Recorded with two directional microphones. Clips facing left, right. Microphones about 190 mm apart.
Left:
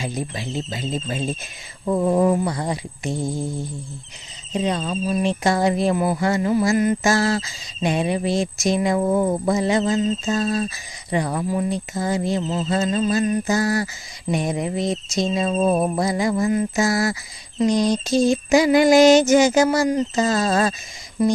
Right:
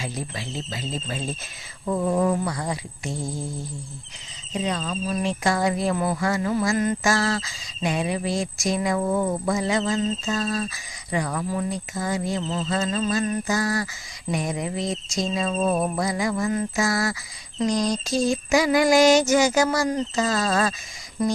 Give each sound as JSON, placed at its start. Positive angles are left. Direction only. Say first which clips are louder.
{"t": 0.0, "sound": "speech", "louder": "left 4 dB", "side_deg": 20}
{"t": 4.5, "sound": "speech", "louder": "left 4 dB", "side_deg": 25}
{"t": 16.5, "sound": "a sound", "louder": "left 4 dB", "side_deg": 10}
{"t": 16.8, "sound": "speech", "louder": "left 4 dB", "side_deg": 25}